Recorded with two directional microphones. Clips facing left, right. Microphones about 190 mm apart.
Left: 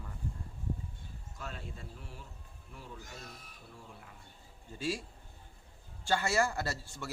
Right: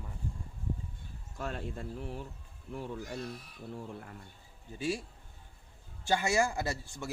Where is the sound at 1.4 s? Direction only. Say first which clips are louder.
Right 7 dB; 50° right (ahead or behind).